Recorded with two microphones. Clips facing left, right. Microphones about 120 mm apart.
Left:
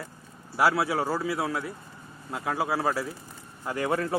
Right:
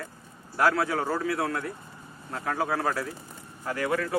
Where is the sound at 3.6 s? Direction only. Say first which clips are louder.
Left 1 dB; 20° left (ahead or behind).